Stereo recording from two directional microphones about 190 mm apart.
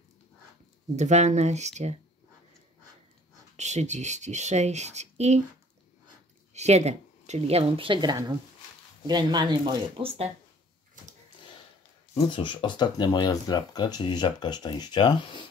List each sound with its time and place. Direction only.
0.9 s speech: 35° right (ahead or behind)
3.5 s speech: 35° right (ahead or behind)
6.5 s speech: 35° right (ahead or behind)
12.1 s speech: 25° left (ahead or behind)